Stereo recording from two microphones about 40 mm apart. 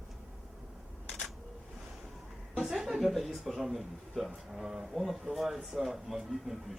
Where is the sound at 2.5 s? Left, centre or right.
Centre.